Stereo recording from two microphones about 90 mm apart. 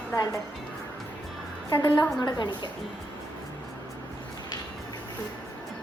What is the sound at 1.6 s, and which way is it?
A woman's voice, 50° left (ahead or behind).